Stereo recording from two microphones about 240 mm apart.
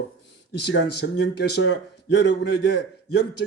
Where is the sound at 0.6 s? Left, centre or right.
Left.